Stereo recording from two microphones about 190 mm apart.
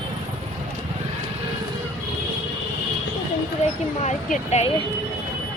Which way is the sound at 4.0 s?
35° left (ahead or behind).